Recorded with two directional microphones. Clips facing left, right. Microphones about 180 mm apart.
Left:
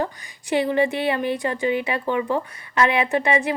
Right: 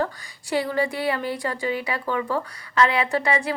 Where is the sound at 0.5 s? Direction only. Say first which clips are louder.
Left 4 dB; 20° left (ahead or behind).